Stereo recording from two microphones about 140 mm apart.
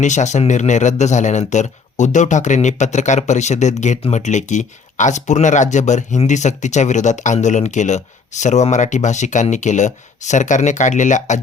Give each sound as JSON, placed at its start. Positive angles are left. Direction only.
{"t": 0.0, "sound": "speech", "side_deg": 60}